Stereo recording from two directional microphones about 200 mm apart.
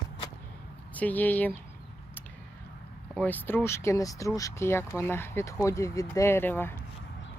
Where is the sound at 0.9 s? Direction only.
10° left (ahead or behind).